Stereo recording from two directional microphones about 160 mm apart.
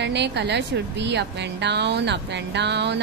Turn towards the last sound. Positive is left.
turn(degrees=-90)